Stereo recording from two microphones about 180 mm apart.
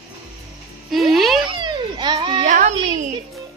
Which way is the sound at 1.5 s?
25° right (ahead or behind).